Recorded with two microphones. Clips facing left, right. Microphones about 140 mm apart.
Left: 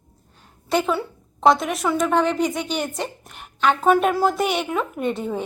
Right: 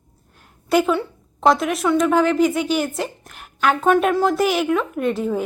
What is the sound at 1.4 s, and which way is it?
A woman's voice, centre (ahead or behind).